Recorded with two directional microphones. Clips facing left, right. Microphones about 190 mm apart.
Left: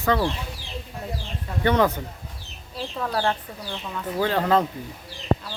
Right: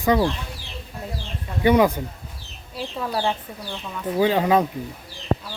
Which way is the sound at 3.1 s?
5° right (ahead or behind).